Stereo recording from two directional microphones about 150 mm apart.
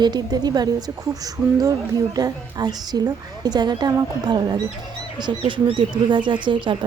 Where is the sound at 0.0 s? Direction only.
25° right (ahead or behind).